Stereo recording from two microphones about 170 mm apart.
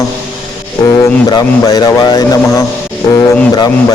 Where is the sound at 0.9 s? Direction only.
25° left (ahead or behind).